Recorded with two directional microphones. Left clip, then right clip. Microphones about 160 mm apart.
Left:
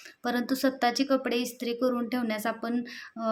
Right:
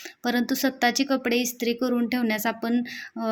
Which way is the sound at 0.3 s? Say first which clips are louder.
Right 3 dB; 15° right (ahead or behind).